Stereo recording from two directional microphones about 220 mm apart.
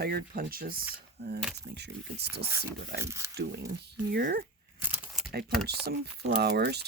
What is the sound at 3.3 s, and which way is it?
Speech, 50° right (ahead or behind).